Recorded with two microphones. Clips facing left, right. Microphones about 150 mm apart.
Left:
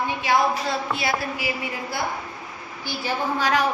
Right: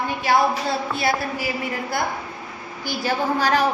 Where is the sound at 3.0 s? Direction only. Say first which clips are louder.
Right 3 dB; 35° right (ahead or behind).